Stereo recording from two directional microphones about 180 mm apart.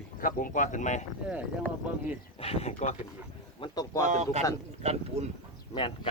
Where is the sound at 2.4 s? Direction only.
35° left (ahead or behind).